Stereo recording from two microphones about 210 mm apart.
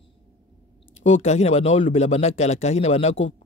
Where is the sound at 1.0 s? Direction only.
30° left (ahead or behind).